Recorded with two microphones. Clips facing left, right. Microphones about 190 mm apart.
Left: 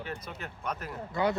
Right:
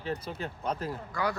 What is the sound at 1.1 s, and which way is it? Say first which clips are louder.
Speech: left 4 dB; 25° left (ahead or behind).